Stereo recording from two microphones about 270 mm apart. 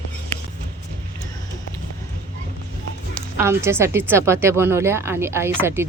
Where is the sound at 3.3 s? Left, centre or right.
Centre.